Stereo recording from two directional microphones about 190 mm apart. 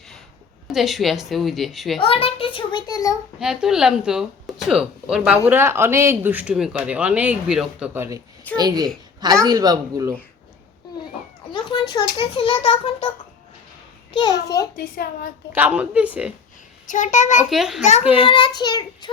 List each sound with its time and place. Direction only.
0.7 s speech: centre (ahead or behind)
2.0 s a child's voice: 30° left (ahead or behind)
3.4 s speech: 5° right (ahead or behind); by 10.2 s 20° right (ahead or behind)
11.5 s a sound: 20° left (ahead or behind)
12.2 s a child's voice: 25° left (ahead or behind)
14.4 s a child's voice: 15° left (ahead or behind)
14.8 s a woman's voice: 50° left (ahead or behind)
15.5 s speech: 5° right (ahead or behind)
16.8 s a child's voice: 40° left (ahead or behind)
17.5 s speech: centre (ahead or behind)
18.2 s a child's voice: 25° left (ahead or behind)